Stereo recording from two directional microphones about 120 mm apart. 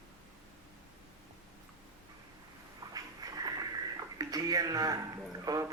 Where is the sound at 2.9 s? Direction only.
30° right (ahead or behind).